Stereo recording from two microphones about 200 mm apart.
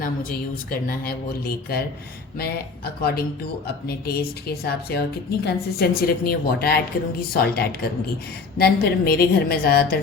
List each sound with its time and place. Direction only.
0.0 s a woman's voice: 45° left (ahead or behind)
8.5 s a woman's voice: 50° left (ahead or behind)